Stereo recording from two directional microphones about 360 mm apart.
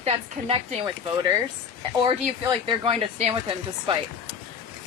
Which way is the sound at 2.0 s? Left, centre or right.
Centre.